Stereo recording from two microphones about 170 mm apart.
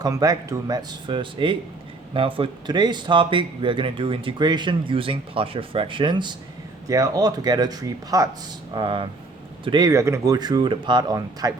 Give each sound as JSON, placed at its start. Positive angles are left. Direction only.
{"t": 0.0, "sound": "speech", "side_deg": -20}